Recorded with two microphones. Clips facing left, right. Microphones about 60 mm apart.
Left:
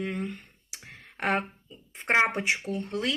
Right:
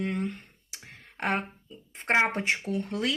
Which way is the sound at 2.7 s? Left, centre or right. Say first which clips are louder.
Right 1 dB; centre.